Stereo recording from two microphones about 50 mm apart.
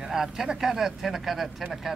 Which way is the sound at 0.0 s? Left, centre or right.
Centre.